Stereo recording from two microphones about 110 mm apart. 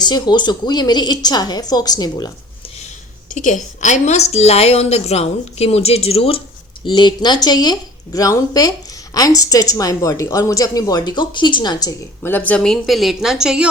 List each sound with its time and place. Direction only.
0.0 s speech: 40° left (ahead or behind)
3.3 s a woman's voice: 90° left; by 6.4 s 60° left (ahead or behind)
6.8 s speech: 45° left (ahead or behind)
12.2 s speech: 15° left (ahead or behind); by 13.7 s 5° right (ahead or behind)